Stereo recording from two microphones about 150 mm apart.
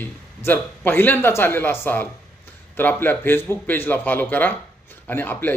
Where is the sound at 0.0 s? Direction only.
15° left (ahead or behind).